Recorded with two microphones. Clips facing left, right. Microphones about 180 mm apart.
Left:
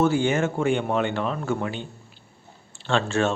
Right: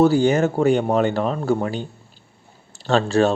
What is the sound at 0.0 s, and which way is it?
Speech, 35° right (ahead or behind).